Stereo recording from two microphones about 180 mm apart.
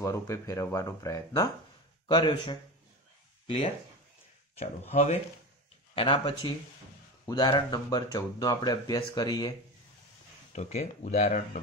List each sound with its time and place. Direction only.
0.0 s speech: 15° left (ahead or behind)
10.5 s speech: 40° left (ahead or behind)